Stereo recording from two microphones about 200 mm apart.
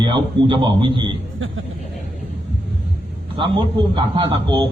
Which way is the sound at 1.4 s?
75° right (ahead or behind).